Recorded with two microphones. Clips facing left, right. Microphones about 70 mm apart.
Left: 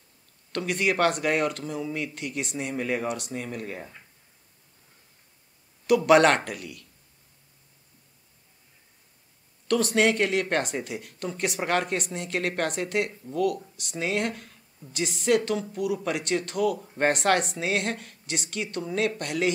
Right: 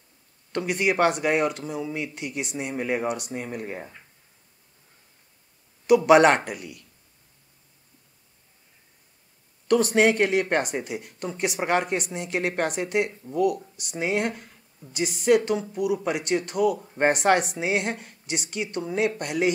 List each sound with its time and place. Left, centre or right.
0.5 s speech: centre
5.9 s speech: centre
9.7 s speech: right